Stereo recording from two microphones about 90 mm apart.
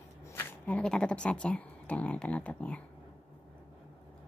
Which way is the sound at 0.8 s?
10° left (ahead or behind).